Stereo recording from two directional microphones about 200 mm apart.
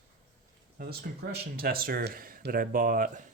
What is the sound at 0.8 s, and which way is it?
Speech, 50° right (ahead or behind).